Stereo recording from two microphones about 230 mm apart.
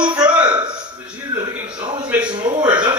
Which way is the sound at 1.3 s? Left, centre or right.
Centre.